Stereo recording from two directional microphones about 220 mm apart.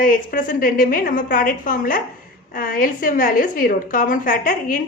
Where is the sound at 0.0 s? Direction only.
40° left (ahead or behind).